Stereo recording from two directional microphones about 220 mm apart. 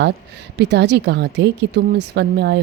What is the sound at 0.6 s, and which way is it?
Speech, 50° right (ahead or behind).